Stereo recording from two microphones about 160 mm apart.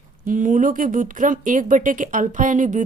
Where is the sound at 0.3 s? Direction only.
55° right (ahead or behind).